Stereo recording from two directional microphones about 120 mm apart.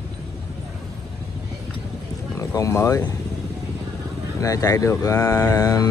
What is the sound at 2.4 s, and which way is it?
Speech, 25° left (ahead or behind).